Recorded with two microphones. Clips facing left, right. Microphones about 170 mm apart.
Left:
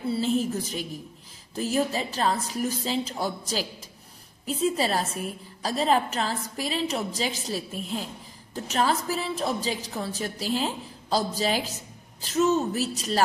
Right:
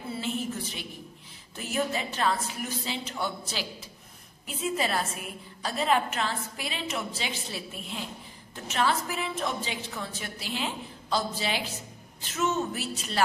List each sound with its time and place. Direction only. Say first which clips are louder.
0.1 s a woman's voice: left 7 dB; 35° left (ahead or behind)